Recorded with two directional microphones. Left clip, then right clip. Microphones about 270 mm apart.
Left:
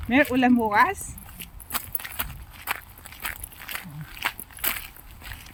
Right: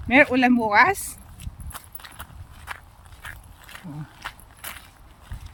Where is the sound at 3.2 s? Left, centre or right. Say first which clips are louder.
Left 5 dB; left.